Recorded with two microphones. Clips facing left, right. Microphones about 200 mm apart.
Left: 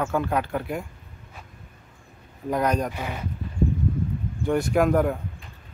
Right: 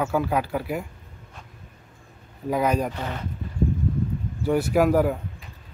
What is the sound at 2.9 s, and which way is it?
Speech, 10° left (ahead or behind).